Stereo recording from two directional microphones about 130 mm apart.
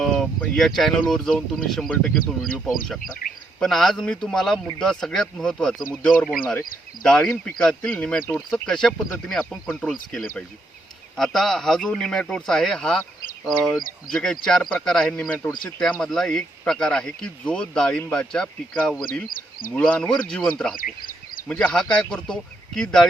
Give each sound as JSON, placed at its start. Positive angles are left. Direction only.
{"t": 0.0, "sound": "a sound", "side_deg": 5}
{"t": 0.3, "sound": "speech", "side_deg": 5}
{"t": 3.2, "sound": "speech", "side_deg": 90}
{"t": 3.6, "sound": "speech", "side_deg": 0}
{"t": 20.7, "sound": "a sound", "side_deg": 90}
{"t": 21.4, "sound": "speech", "side_deg": 10}